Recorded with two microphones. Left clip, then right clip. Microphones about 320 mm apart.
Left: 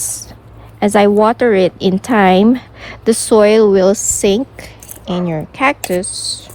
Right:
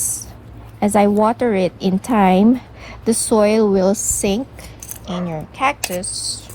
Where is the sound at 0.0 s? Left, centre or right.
Left.